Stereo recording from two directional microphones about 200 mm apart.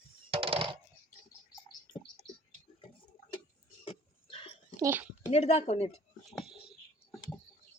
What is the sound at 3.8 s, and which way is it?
Dog, 25° left (ahead or behind).